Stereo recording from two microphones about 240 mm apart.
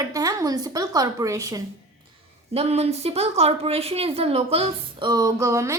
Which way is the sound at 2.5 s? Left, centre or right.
Right.